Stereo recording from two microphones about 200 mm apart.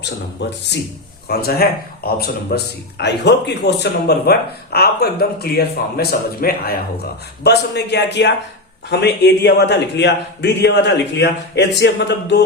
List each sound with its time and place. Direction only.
1.3 s a man's voice: 50° left (ahead or behind)